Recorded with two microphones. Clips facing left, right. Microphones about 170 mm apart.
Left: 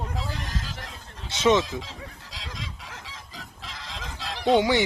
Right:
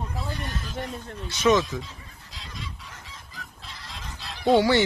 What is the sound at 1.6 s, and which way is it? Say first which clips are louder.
Goose: even; 90° left.